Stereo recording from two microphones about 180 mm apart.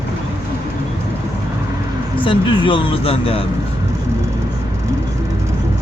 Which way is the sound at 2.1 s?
30° left (ahead or behind).